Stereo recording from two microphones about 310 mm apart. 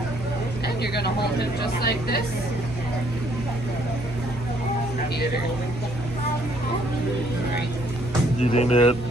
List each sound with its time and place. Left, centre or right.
0.9 s speech: left
8.4 s speech: left